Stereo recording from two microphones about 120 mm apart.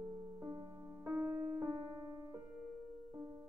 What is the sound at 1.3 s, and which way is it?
Music, 25° right (ahead or behind).